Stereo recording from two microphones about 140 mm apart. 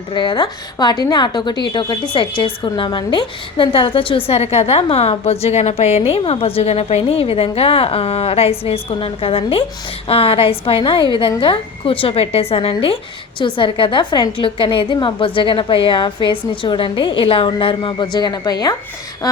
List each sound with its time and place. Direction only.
0.1 s a woman's voice: 35° left (ahead or behind)